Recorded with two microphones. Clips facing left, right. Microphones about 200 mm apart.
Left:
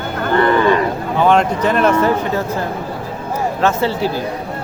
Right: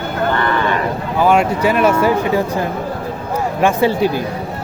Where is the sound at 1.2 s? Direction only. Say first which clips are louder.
Even; 10° right (ahead or behind).